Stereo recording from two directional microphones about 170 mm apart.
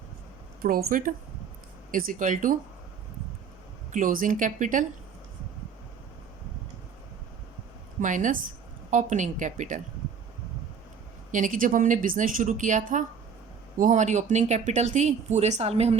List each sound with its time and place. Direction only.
0.6 s speech: 60° right (ahead or behind)
3.9 s speech: 50° right (ahead or behind)
8.0 s speech: 50° right (ahead or behind)
11.3 s speech: 50° right (ahead or behind)